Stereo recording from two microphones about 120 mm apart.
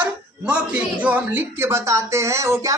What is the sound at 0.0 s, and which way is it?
Speech, 10° right (ahead or behind).